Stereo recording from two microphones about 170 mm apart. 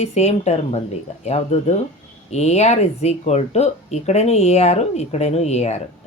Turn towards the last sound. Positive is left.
turn(degrees=40)  # may be behind; listen again after turning